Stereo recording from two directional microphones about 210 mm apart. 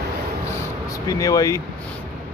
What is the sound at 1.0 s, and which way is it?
Speech, 15° left (ahead or behind).